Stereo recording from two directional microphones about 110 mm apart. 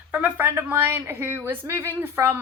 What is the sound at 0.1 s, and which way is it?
A woman's voice, 15° right (ahead or behind).